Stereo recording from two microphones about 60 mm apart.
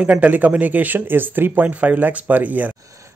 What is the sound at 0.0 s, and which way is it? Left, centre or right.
Speech, right.